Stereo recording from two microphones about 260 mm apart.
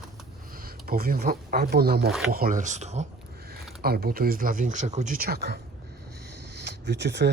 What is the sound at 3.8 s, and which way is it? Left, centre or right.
Speech, right.